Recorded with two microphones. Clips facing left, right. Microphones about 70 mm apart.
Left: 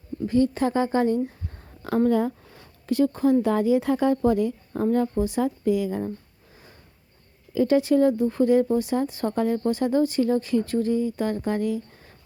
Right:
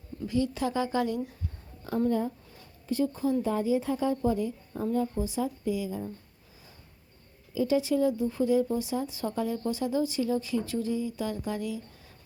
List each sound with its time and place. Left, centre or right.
0.3 s speech: left
2.0 s speech: left
7.5 s speech: left